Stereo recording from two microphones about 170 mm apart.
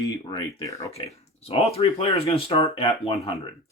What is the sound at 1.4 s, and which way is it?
Speech, 35° left (ahead or behind).